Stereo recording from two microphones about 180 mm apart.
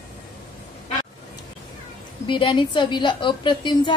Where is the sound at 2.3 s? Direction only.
25° left (ahead or behind).